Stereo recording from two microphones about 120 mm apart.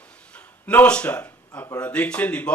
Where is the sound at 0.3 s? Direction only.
10° left (ahead or behind).